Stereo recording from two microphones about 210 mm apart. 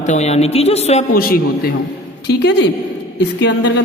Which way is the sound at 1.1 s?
45° left (ahead or behind).